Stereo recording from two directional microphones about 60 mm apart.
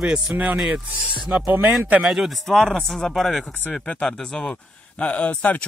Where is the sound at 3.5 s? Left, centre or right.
Left.